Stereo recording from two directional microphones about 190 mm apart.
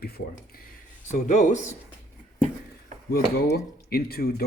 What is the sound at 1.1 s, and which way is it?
Speech, 40° left (ahead or behind).